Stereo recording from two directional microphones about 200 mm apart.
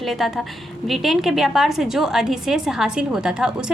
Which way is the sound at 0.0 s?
Centre (ahead or behind).